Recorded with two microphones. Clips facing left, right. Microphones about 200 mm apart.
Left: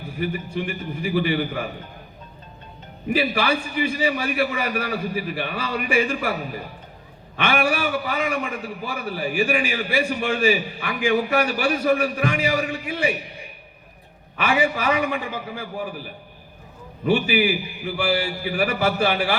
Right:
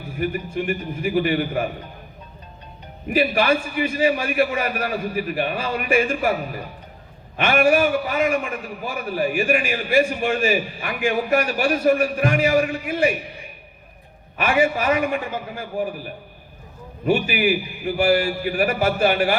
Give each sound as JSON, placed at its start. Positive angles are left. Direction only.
{"t": 0.2, "sound": "a man's voice", "side_deg": -45}
{"t": 3.1, "sound": "a man's voice", "side_deg": -45}
{"t": 7.3, "sound": "a man's voice", "side_deg": -45}
{"t": 14.3, "sound": "a man's voice", "side_deg": -50}
{"t": 17.1, "sound": "a man's voice", "side_deg": -45}